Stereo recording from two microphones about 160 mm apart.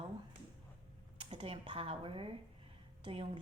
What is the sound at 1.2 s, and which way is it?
Speech, 35° right (ahead or behind).